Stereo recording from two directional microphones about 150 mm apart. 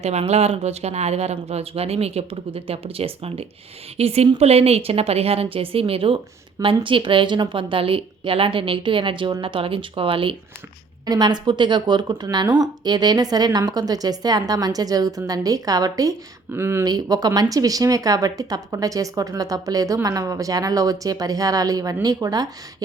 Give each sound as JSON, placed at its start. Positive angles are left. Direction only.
{"t": 0.0, "sound": "a woman's voice", "side_deg": -45}